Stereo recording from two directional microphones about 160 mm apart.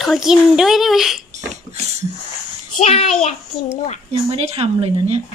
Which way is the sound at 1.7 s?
25° right (ahead or behind).